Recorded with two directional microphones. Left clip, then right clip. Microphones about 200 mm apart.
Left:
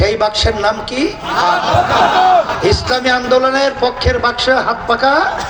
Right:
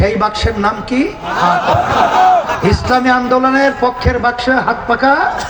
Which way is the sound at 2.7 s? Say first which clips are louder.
Right 1 dB; 50° left (ahead or behind).